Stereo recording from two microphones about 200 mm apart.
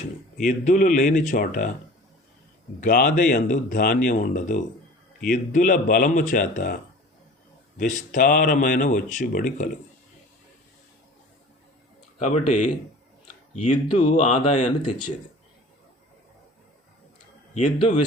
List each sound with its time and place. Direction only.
0.4 s speech: 40° left (ahead or behind)
2.8 s speech: 45° left (ahead or behind)
7.8 s speech: 40° left (ahead or behind)
12.2 s speech: 35° left (ahead or behind)
13.8 s speech: 25° left (ahead or behind)
17.7 s speech: 35° left (ahead or behind)